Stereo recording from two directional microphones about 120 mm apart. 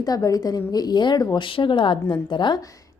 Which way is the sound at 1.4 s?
45° left (ahead or behind).